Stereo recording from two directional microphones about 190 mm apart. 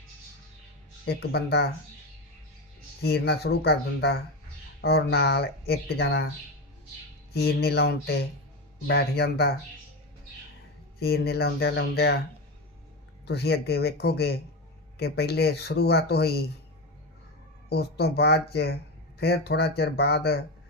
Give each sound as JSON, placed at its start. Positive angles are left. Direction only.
{"t": 1.0, "sound": "speech", "side_deg": 60}
{"t": 3.0, "sound": "speech", "side_deg": 60}
{"t": 7.3, "sound": "speech", "side_deg": 55}
{"t": 11.0, "sound": "speech", "side_deg": 55}
{"t": 13.2, "sound": "speech", "side_deg": 60}
{"t": 17.7, "sound": "speech", "side_deg": 55}